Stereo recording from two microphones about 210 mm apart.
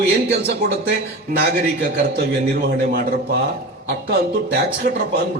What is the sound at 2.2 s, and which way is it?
A man's voice, 45° right (ahead or behind).